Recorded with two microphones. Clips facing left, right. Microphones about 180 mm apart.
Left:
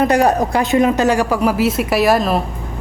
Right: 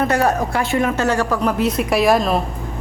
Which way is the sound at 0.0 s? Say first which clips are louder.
Left 4 dB; 15° left (ahead or behind).